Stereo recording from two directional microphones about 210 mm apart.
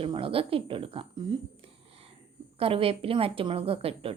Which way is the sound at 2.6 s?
25° right (ahead or behind).